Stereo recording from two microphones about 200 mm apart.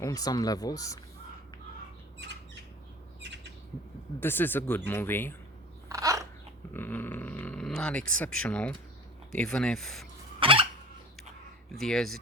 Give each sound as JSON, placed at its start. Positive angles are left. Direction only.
{"t": 0.0, "sound": "speech", "side_deg": 20}
{"t": 2.1, "sound": "bird", "side_deg": -60}
{"t": 4.2, "sound": "speech", "side_deg": 10}
{"t": 5.9, "sound": "biting", "side_deg": -15}
{"t": 6.7, "sound": "a sound", "side_deg": 10}
{"t": 8.2, "sound": "speech", "side_deg": 5}
{"t": 10.4, "sound": "fowl", "side_deg": -25}
{"t": 11.8, "sound": "speech", "side_deg": 0}